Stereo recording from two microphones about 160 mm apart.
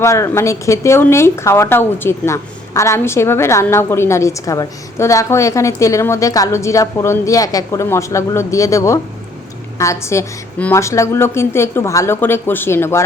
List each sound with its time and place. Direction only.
0.0 s speech: 20° left (ahead or behind)